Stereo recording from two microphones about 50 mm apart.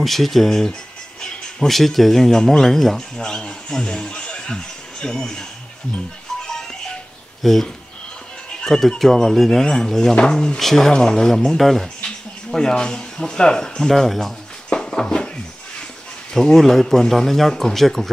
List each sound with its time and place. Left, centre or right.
0.0 s speech: centre
3.2 s a man's voice: centre
7.4 s speech: centre
8.6 s speech: centre
14.7 s a sound: centre
16.3 s speech: centre